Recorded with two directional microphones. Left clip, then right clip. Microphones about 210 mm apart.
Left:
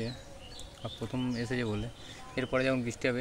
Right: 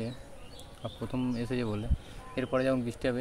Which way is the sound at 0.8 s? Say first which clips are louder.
Right 1 dB; centre (ahead or behind).